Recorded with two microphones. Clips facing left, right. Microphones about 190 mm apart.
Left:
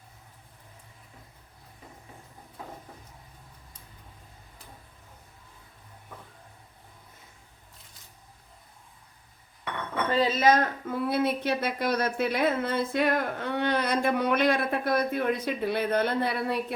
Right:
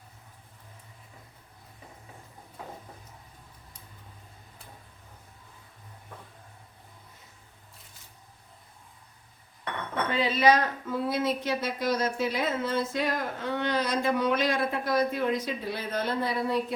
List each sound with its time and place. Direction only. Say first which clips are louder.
10.1 s a woman's voice: left 1 dB; 40° left (ahead or behind); by 16.7 s 60° left (ahead or behind)